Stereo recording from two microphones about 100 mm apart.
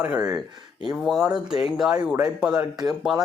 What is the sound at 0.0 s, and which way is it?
Speech, 10° right (ahead or behind).